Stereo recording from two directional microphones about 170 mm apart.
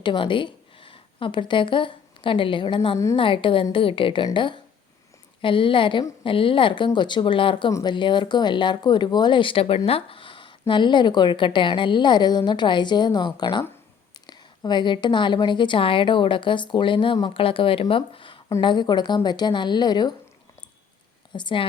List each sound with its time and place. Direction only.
0.0 s a woman's voice: 30° left (ahead or behind)
21.3 s speech: 30° left (ahead or behind)